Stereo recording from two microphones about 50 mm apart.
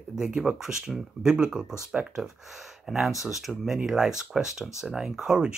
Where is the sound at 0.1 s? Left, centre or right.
Centre.